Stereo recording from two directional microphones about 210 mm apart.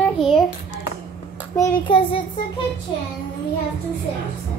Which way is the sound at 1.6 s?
25° left (ahead or behind).